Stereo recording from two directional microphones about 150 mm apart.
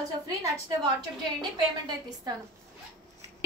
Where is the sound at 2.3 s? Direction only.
25° right (ahead or behind).